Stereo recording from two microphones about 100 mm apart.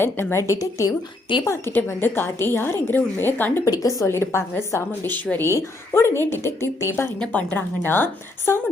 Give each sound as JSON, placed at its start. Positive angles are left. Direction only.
{"t": 0.0, "sound": "a woman's voice", "side_deg": 25}
{"t": 1.5, "sound": "a woman's voice", "side_deg": 25}
{"t": 3.7, "sound": "a woman's voice", "side_deg": 35}
{"t": 5.5, "sound": "a woman's voice", "side_deg": 25}
{"t": 7.2, "sound": "a woman's voice", "side_deg": 15}